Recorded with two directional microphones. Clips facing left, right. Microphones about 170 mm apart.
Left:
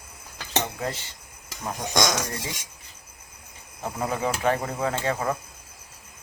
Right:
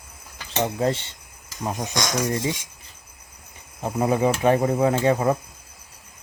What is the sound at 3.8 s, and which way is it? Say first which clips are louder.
Speech: right 7 dB; 15° right (ahead or behind).